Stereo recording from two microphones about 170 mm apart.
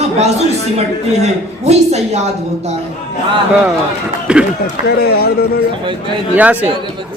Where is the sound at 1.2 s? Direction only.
40° right (ahead or behind).